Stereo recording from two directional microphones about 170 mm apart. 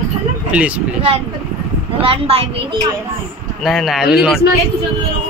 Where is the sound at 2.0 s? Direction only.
35° right (ahead or behind).